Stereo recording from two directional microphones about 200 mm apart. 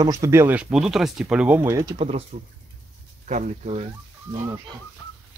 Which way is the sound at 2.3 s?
40° right (ahead or behind).